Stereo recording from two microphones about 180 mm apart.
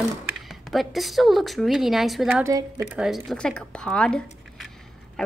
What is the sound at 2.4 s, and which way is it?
Speech, 15° right (ahead or behind).